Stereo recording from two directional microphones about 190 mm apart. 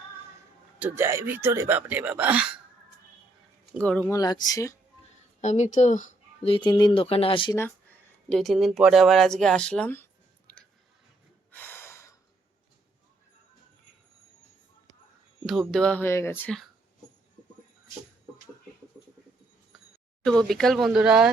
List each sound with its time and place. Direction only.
0.8 s speech: 10° right (ahead or behind)
3.8 s speech: 5° left (ahead or behind)
4.1 s speech: 20° left (ahead or behind)
5.4 s speech: 35° left (ahead or behind)
7.5 s speech: 10° left (ahead or behind)
11.5 s gasp: 10° left (ahead or behind)
15.4 s speech: centre (ahead or behind)
20.2 s speech: centre (ahead or behind)